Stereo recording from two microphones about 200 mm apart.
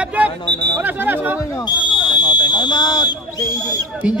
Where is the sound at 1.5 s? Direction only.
20° left (ahead or behind).